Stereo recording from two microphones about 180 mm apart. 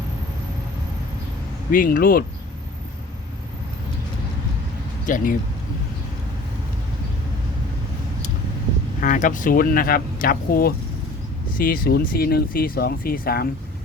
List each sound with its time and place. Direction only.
1.7 s speech: 50° left (ahead or behind)
5.0 s speech: 50° left (ahead or behind)
9.0 s speech: 45° left (ahead or behind)